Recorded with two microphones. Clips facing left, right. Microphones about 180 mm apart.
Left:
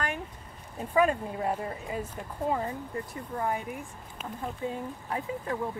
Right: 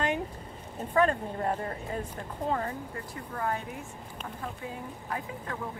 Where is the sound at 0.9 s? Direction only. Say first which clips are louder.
Left 1 dB; 10° left (ahead or behind).